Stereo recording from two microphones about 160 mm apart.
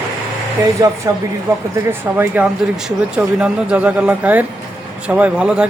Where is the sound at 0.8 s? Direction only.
25° right (ahead or behind).